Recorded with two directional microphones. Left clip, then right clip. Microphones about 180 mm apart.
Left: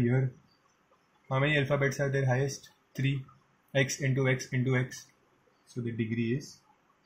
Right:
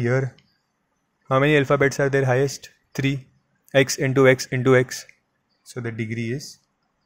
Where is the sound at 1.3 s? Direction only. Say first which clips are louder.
Right 10 dB; 55° right (ahead or behind).